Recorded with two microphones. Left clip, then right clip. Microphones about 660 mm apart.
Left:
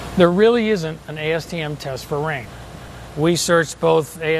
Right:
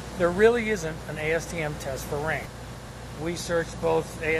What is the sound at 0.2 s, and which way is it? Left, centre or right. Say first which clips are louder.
Speech: left 7 dB; left.